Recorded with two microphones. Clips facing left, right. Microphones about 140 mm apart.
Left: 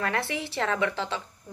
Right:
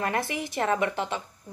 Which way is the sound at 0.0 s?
15° right (ahead or behind).